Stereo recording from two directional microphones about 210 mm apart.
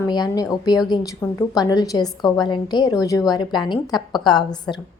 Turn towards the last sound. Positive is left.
turn(degrees=20)  # may be behind; listen again after turning